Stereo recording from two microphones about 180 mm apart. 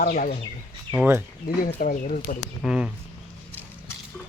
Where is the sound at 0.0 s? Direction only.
50° left (ahead or behind).